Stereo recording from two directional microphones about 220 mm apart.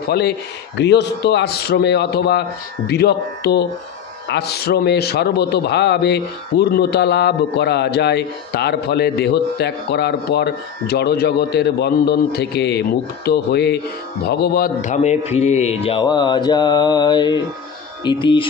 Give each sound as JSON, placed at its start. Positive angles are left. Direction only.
{"t": 0.7, "sound": "a man's voice", "side_deg": 50}
{"t": 15.3, "sound": "mantra", "side_deg": 30}